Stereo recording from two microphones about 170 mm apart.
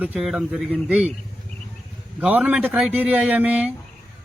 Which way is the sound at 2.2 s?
10° right (ahead or behind).